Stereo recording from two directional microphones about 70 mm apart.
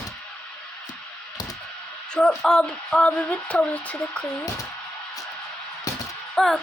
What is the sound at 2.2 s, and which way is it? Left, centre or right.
Speech, centre.